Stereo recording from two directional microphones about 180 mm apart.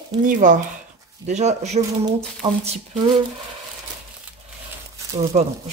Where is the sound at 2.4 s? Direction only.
25° right (ahead or behind).